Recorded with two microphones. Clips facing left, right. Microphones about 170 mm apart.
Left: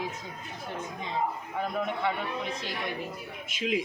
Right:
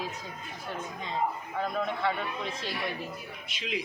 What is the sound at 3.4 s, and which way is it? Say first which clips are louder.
Speech: left 6 dB; 45° left (ahead or behind).